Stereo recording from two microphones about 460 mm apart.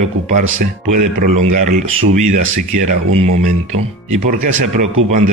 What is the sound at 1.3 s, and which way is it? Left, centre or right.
Speech, right.